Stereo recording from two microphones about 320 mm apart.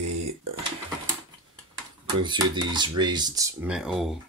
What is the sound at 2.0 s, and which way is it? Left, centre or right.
Dishes, centre.